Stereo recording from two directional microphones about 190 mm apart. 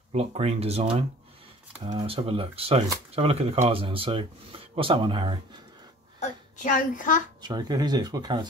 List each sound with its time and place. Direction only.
0.1 s speech: 30° right (ahead or behind)
1.9 s speech: 30° right (ahead or behind)
6.1 s a child's voice: 40° left (ahead or behind)
7.4 s speech: 20° right (ahead or behind)